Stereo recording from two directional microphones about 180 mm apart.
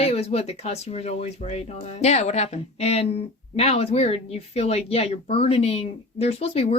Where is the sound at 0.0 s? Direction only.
35° left (ahead or behind).